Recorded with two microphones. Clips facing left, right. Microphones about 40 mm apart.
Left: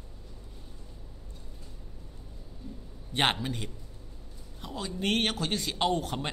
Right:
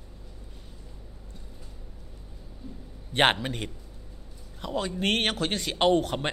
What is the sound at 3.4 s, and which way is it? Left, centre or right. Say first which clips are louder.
A man's voice: right 2 dB; right.